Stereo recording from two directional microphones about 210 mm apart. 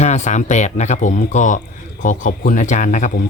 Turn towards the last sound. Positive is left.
turn(degrees=35)  # may be behind; listen again after turning